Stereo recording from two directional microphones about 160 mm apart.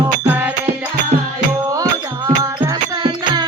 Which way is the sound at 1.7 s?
20° right (ahead or behind).